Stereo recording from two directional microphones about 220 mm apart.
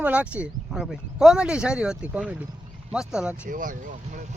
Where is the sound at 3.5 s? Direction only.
35° right (ahead or behind).